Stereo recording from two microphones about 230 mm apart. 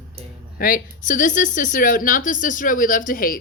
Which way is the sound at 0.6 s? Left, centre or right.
Left.